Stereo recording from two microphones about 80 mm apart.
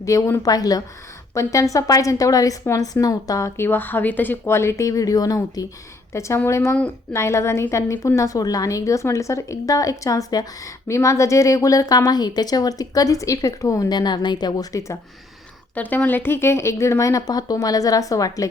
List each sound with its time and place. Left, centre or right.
0.0 s a woman's voice: left
1.3 s a woman's voice: left
3.6 s a woman's voice: left
6.1 s a woman's voice: left
15.7 s a woman's voice: centre; by 18.4 s left